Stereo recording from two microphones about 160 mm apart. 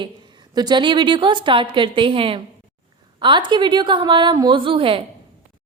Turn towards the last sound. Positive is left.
turn(degrees=-35)  # may be behind; listen again after turning